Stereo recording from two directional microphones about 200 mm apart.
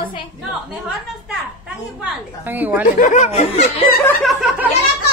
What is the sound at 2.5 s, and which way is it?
Speech, 10° right (ahead or behind).